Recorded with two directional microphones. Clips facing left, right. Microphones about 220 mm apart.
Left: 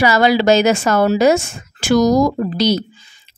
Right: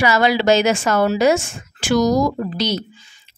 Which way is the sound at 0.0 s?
40° left (ahead or behind).